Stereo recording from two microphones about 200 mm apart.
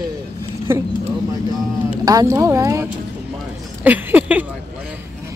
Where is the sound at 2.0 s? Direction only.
15° right (ahead or behind).